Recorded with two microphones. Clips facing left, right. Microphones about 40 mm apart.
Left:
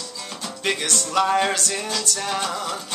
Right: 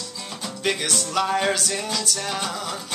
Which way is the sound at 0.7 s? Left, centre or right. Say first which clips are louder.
Even; centre.